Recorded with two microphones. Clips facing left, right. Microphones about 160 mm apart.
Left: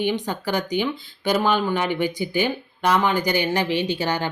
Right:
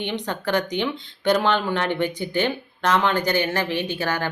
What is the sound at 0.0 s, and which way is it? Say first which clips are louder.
Speech: left 3 dB; 10° left (ahead or behind).